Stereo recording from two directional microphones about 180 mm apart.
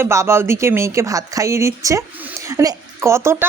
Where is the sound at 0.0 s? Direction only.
15° right (ahead or behind).